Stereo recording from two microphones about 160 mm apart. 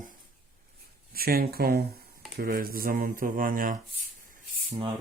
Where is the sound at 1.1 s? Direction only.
70° right (ahead or behind).